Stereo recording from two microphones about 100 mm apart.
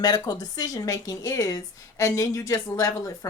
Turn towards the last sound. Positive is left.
turn(degrees=35)  # may be behind; listen again after turning